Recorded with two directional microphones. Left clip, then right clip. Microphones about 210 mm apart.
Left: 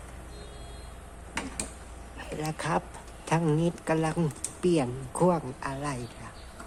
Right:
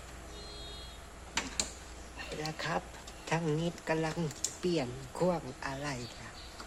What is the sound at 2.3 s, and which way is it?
Speech, 15° left (ahead or behind).